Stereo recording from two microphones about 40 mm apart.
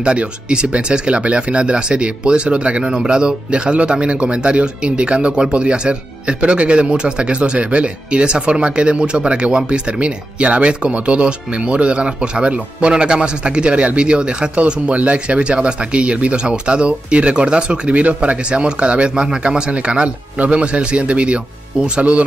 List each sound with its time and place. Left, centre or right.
0.0 s speech: right